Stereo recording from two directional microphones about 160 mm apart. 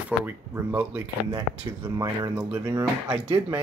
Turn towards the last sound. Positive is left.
turn(degrees=-20)  # may be behind; listen again after turning